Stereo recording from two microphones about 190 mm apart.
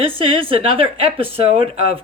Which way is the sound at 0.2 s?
30° right (ahead or behind).